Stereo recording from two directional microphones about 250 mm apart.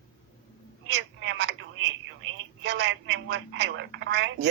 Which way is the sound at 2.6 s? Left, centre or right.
Right.